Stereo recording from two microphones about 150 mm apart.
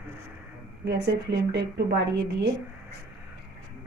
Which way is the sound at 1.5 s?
90° right.